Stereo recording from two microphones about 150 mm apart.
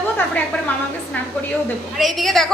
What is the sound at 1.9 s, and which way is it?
Speech, centre (ahead or behind).